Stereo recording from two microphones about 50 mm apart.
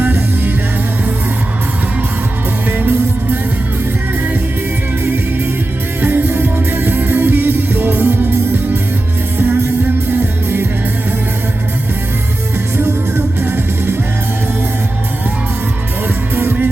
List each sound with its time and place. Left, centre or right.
0.0 s music: right
2.6 s music: right
6.0 s music: right
9.8 s music: right
12.7 s music: right
16.3 s music: right